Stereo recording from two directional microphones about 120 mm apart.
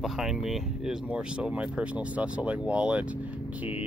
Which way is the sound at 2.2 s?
10° right (ahead or behind).